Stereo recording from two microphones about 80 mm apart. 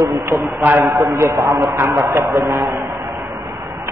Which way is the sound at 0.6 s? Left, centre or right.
Right.